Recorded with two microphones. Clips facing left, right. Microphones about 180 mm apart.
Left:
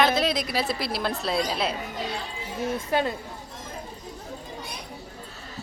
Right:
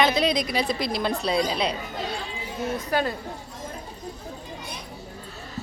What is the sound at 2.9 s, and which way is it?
Speech, 25° left (ahead or behind).